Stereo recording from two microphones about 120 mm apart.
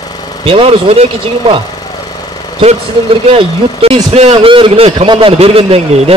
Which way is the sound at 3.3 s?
55° right (ahead or behind).